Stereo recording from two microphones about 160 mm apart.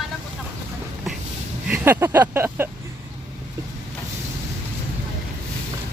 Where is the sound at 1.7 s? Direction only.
10° right (ahead or behind).